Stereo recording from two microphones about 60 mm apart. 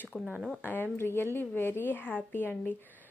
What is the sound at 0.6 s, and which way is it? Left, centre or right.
Speech, left.